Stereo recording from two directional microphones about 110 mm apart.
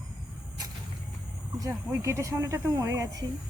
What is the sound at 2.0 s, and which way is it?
Speech, 25° right (ahead or behind).